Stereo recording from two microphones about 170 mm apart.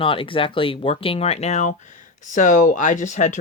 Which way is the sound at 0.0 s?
30° left (ahead or behind).